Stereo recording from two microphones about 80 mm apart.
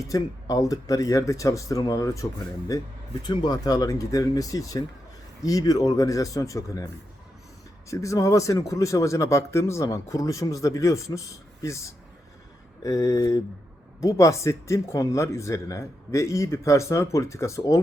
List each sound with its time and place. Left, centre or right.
0.1 s speech: left
3.2 s speech: left